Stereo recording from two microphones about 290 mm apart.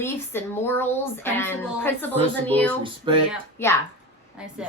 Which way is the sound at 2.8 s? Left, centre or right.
Centre.